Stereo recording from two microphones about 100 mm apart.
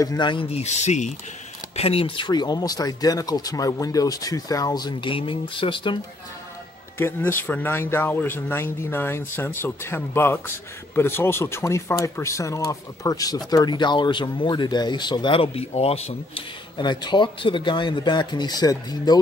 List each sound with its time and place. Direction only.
0.0 s speech: 40° left (ahead or behind)
0.3 s speech: 75° left (ahead or behind)
1.8 s speech: 75° left (ahead or behind); by 5.1 s 45° left (ahead or behind)
5.1 s speech: 60° left (ahead or behind)
7.0 s speech: 25° left (ahead or behind); by 16.4 s 80° left
16.7 s speech: 50° left (ahead or behind)